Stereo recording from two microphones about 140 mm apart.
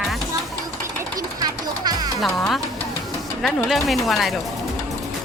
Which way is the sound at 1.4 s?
30° right (ahead or behind).